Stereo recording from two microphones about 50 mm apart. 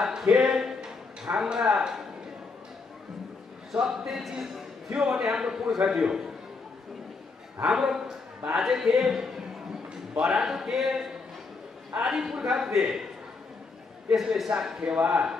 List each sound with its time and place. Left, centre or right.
0.0 s a sound: centre
3.7 s a man's voice: centre
5.2 s a man's voice: centre
7.6 s a man's voice: centre
14.1 s a man's voice: centre
14.8 s a man's voice: centre